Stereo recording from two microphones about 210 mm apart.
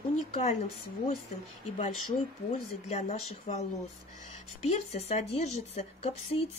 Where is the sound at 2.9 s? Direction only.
35° left (ahead or behind).